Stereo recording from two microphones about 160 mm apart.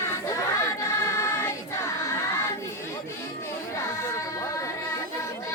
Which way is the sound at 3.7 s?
20° left (ahead or behind).